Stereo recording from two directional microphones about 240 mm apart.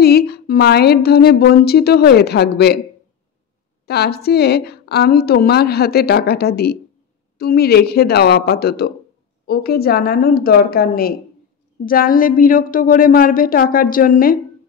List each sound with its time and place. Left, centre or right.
0.0 s a woman's voice: left
3.8 s a woman's voice: left